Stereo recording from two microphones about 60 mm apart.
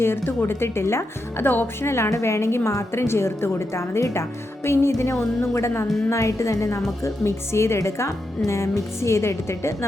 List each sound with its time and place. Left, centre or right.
0.0 s a woman's voice: left